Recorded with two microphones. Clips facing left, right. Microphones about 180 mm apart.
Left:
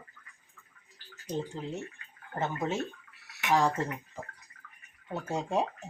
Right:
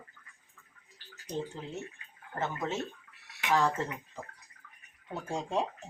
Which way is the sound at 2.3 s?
15° left (ahead or behind).